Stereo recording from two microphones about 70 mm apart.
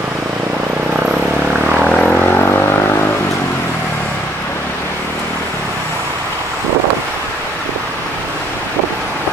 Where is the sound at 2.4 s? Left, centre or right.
Left.